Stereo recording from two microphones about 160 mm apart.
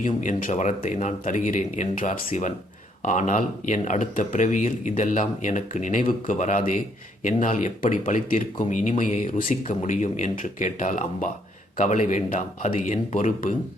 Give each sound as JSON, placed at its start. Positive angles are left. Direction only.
{"t": 0.0, "sound": "speech", "side_deg": 50}